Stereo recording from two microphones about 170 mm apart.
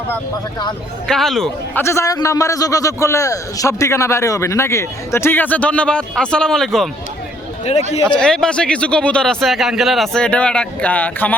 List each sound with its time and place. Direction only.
1.0 s a man's voice: centre (ahead or behind)
1.8 s a man's voice: 15° left (ahead or behind)
7.6 s speech: 40° left (ahead or behind)
8.0 s a man's voice: 5° left (ahead or behind)